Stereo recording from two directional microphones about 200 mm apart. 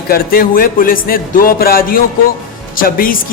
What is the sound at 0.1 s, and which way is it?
Speech, 45° left (ahead or behind).